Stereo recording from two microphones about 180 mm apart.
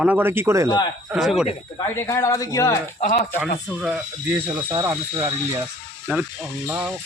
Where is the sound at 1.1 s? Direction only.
5° right (ahead or behind).